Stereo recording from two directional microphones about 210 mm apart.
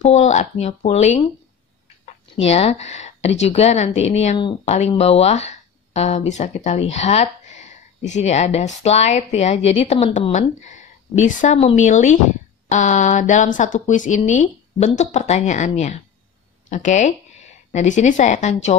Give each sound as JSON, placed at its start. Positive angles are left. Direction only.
{"t": 0.0, "sound": "speech", "side_deg": 35}
{"t": 2.4, "sound": "speech", "side_deg": 30}